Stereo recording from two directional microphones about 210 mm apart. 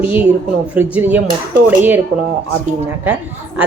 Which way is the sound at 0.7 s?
5° right (ahead or behind).